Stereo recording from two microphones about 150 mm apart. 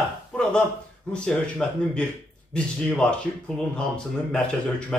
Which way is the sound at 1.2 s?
5° left (ahead or behind).